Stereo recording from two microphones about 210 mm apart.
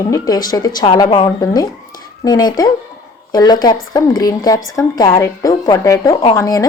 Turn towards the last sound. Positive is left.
turn(degrees=15)  # may be behind; listen again after turning